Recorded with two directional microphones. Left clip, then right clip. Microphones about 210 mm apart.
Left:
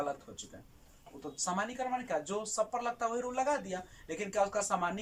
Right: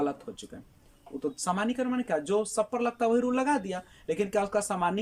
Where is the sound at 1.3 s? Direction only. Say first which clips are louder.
Right 4 dB; 55° right (ahead or behind).